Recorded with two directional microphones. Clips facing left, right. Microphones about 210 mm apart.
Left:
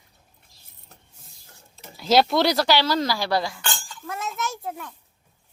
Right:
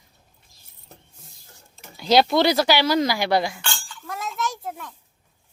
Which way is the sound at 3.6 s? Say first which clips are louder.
Left 1 dB; 40° left (ahead or behind).